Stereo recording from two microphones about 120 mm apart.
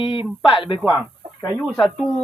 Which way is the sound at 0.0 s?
45° left (ahead or behind).